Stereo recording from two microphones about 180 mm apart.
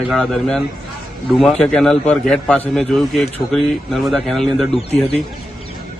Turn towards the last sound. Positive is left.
turn(degrees=35)  # may be behind; listen again after turning